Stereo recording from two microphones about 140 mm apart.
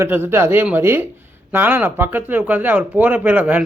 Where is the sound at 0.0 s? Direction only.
15° right (ahead or behind).